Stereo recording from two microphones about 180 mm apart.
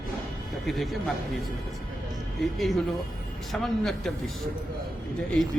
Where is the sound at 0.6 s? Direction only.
Centre (ahead or behind).